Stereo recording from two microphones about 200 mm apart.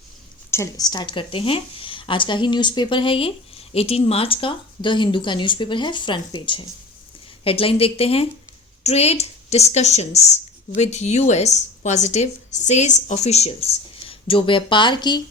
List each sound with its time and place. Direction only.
0.5 s speech: 15° left (ahead or behind)